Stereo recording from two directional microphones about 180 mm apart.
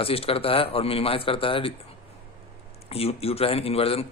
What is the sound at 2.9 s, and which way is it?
Speech, 35° left (ahead or behind).